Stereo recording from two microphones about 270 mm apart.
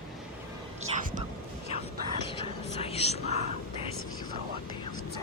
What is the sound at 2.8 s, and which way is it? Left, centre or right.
Speech, left.